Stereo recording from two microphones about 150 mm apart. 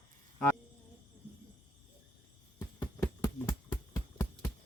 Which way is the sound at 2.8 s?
20° left (ahead or behind).